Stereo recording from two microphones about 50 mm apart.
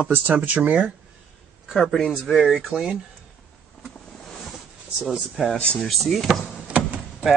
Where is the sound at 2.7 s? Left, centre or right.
Centre.